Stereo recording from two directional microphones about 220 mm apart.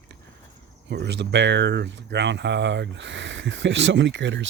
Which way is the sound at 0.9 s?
50° right (ahead or behind).